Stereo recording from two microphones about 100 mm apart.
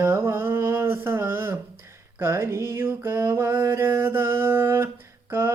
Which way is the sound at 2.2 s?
25° right (ahead or behind).